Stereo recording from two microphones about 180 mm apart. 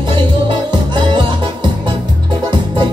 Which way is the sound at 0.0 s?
25° right (ahead or behind).